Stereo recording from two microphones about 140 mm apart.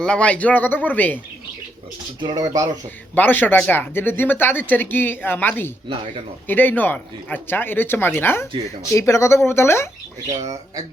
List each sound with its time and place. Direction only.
0.0 s speech: 5° left (ahead or behind)
2.2 s speech: 30° right (ahead or behind)
3.2 s speech: 15° left (ahead or behind)